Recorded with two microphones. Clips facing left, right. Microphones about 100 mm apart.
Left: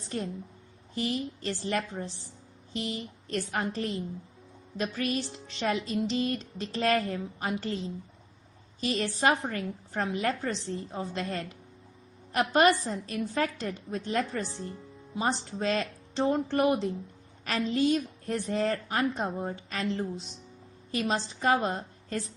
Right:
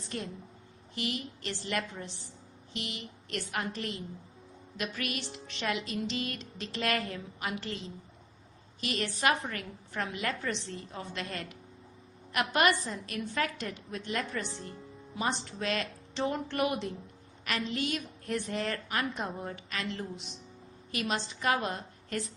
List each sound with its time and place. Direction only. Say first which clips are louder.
0.9 s music: left 5 dB; 35° left (ahead or behind)
8.8 s music: left 4 dB; 30° left (ahead or behind)
21.4 s a woman's voice: left 5 dB; 30° left (ahead or behind)